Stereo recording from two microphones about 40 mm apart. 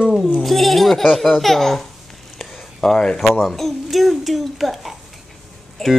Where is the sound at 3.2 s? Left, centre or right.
Centre.